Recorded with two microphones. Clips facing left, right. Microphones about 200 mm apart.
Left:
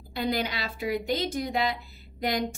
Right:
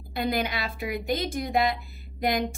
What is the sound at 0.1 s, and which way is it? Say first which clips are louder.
A woman's voice: right 1 dB; 50° right (ahead or behind).